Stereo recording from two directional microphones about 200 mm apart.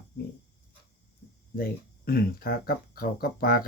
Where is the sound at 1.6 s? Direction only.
50° left (ahead or behind).